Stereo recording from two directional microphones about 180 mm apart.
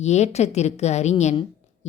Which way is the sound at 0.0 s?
40° left (ahead or behind).